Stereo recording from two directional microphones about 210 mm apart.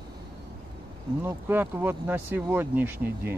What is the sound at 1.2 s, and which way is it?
Speech, 10° right (ahead or behind).